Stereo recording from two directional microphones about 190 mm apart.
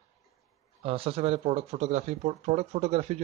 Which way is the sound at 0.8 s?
30° right (ahead or behind).